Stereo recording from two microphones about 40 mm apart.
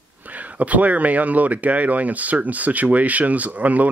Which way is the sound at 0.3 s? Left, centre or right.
Right.